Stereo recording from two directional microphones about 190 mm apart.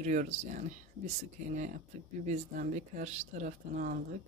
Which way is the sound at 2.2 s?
40° right (ahead or behind).